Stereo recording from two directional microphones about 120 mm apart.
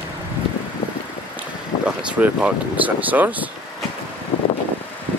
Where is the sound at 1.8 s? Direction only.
10° right (ahead or behind).